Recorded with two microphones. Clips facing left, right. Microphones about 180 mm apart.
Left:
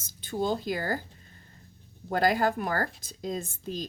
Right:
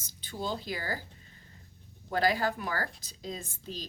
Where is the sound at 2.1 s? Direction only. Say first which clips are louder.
Left 4 dB; 50° left (ahead or behind).